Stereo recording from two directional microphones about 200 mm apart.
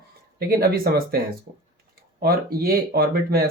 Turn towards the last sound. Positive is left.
turn(degrees=-50)  # may be behind; listen again after turning